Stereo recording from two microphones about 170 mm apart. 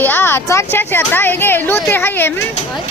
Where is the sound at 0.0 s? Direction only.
10° left (ahead or behind).